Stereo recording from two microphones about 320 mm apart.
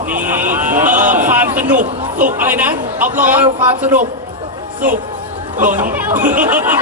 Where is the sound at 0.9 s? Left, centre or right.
Right.